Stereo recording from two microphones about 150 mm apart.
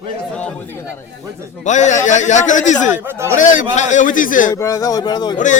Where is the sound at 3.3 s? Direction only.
55° left (ahead or behind).